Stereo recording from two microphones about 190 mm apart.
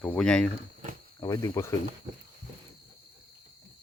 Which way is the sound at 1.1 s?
20° left (ahead or behind).